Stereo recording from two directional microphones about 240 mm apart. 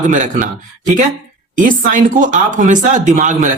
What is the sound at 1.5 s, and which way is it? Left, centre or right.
Speech, right.